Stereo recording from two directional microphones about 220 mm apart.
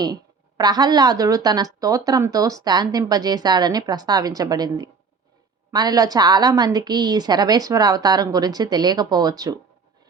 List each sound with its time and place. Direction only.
0.0 s a woman's voice: 20° right (ahead or behind)